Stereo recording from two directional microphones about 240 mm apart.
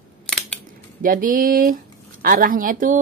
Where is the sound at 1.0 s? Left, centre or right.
Right.